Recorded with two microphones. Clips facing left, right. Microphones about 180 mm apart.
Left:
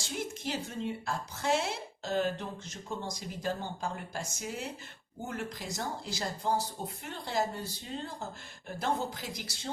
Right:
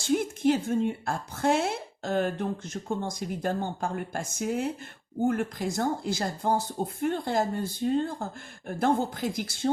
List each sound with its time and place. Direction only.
0.0 s speech: 55° right (ahead or behind)